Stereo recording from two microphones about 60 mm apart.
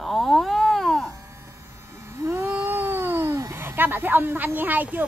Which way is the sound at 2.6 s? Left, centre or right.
Right.